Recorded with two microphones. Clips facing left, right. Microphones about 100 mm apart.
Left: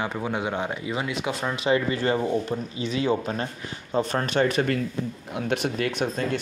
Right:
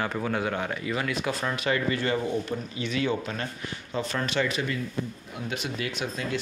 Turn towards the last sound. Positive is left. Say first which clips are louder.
# left 5 dB
turn(degrees=55)  # may be behind; listen again after turning